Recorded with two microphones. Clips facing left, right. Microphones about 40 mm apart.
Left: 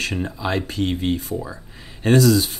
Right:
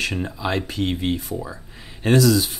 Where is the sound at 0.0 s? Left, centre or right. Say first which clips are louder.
Even; centre.